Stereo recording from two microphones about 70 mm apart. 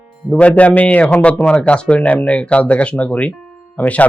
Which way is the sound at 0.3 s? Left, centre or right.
Centre.